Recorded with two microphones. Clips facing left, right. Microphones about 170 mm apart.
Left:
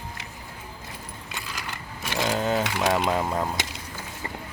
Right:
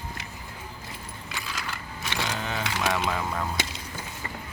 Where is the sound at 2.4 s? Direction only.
40° left (ahead or behind).